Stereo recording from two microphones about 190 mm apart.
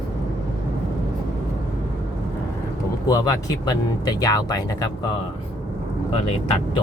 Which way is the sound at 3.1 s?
20° left (ahead or behind).